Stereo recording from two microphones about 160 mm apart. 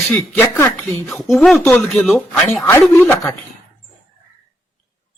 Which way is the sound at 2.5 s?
15° left (ahead or behind).